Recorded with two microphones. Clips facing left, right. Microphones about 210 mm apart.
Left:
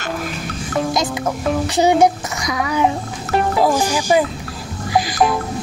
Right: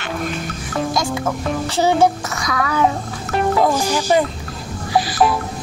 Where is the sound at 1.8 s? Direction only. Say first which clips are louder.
Left 1 dB; 15° left (ahead or behind).